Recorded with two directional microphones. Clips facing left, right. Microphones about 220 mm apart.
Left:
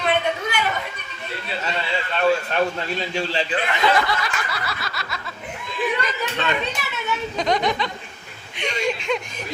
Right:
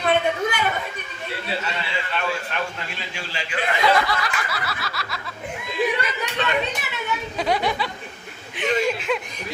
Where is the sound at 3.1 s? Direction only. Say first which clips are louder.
Left 8 dB; 35° left (ahead or behind).